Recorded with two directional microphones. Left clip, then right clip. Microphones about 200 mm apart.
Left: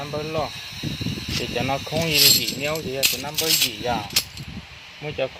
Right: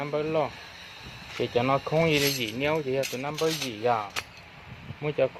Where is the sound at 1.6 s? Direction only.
15° right (ahead or behind).